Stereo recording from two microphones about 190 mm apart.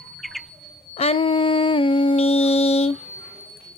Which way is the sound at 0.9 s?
30° left (ahead or behind).